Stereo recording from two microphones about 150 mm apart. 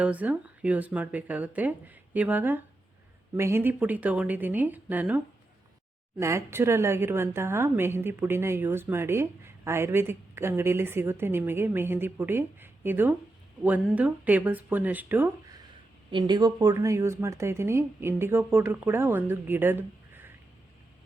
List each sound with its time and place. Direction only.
0.0 s a woman's voice: 10° right (ahead or behind)
16.1 s a woman's voice: 30° right (ahead or behind)